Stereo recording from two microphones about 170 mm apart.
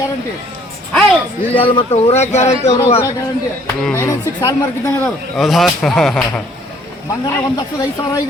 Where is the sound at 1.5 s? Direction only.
30° left (ahead or behind).